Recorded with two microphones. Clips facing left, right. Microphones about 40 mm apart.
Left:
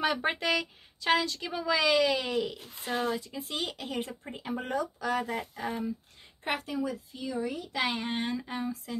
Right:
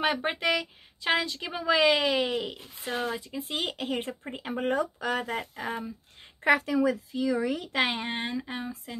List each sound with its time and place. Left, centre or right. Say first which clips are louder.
0.4 s speech: right 2 dB; right
6.4 s a woman's voice: right 9 dB; right
7.7 s speech: right 3 dB; right
8.0 s speech: even; right